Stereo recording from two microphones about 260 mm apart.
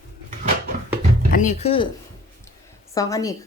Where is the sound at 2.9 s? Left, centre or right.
Centre.